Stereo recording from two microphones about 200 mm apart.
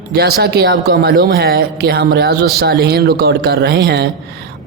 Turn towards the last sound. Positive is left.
turn(degrees=-55)  # may be behind; listen again after turning